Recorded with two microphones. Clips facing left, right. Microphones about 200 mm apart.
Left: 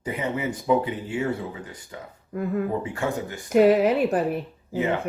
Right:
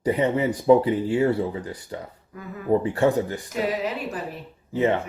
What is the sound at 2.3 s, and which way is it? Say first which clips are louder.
Speech: left 13 dB; 50° left (ahead or behind).